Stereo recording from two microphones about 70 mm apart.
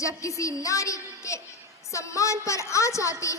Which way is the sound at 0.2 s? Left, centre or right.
Left.